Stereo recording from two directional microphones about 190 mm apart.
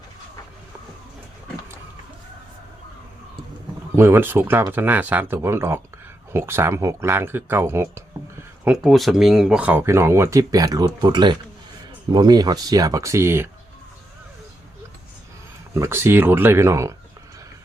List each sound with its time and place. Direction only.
3.9 s speech: 10° right (ahead or behind)
8.6 s speech: centre (ahead or behind)
15.7 s speech: 15° right (ahead or behind)